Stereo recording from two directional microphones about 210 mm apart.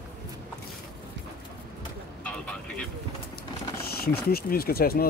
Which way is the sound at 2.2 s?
5° left (ahead or behind).